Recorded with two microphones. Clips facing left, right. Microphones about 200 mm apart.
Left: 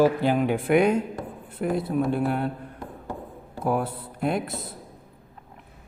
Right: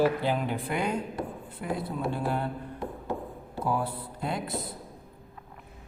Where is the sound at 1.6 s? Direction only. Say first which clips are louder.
Left 7 dB; 55° left (ahead or behind).